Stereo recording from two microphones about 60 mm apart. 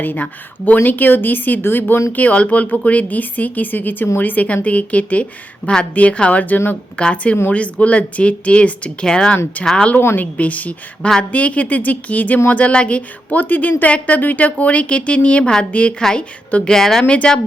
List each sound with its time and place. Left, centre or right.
0.0 s a woman's voice: left
2.1 s a woman's voice: left
9.6 s a woman's voice: left
16.0 s speech: centre
16.5 s a woman's voice: left
16.7 s speech: centre